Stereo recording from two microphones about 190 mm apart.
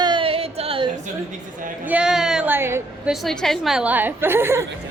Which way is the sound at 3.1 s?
Centre (ahead or behind).